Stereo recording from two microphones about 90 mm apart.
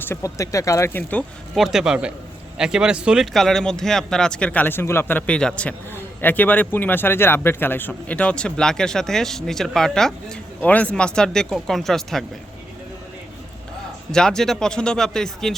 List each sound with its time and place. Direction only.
0.2 s speech: 35° left (ahead or behind)
1.5 s speech: 5° right (ahead or behind)
3.3 s a man's voice: 5° left (ahead or behind)
10.6 s a man's voice: 15° left (ahead or behind)
14.1 s a man's voice: 5° left (ahead or behind)